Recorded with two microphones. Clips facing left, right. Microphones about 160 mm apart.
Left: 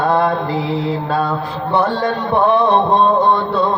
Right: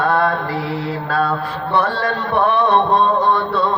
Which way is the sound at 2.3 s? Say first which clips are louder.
Left 2 dB; 25° left (ahead or behind).